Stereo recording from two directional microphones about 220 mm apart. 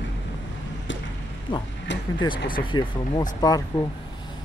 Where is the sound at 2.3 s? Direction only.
40° left (ahead or behind).